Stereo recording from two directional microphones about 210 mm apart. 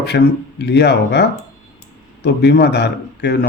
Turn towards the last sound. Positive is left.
turn(degrees=50)  # may be behind; listen again after turning